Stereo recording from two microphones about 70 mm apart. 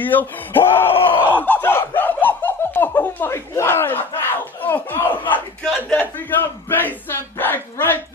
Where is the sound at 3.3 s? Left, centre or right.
Left.